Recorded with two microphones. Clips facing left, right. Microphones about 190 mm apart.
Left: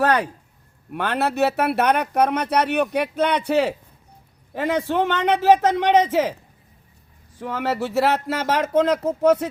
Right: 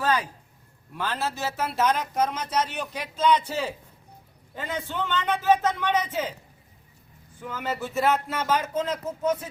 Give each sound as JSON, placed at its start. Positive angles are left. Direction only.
{"t": 0.0, "sound": "speech", "side_deg": 65}
{"t": 7.3, "sound": "speech", "side_deg": 70}